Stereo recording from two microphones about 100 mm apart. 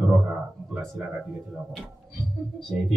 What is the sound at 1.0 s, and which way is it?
Speech, 10° right (ahead or behind).